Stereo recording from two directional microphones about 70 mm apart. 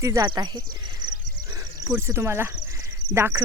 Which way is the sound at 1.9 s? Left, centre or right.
Right.